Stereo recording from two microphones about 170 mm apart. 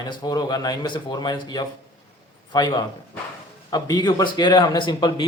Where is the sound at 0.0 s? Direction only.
25° left (ahead or behind).